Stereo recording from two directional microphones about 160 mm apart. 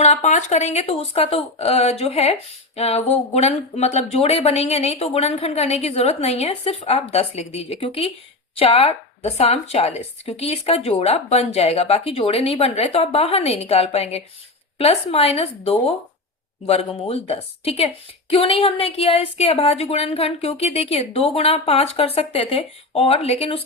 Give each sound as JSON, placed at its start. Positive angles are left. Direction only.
{"t": 0.0, "sound": "speech", "side_deg": 45}